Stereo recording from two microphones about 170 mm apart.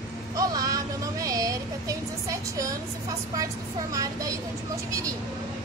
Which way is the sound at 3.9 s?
20° right (ahead or behind).